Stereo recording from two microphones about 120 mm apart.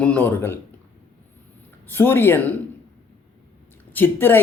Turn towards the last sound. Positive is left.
turn(degrees=15)  # may be behind; listen again after turning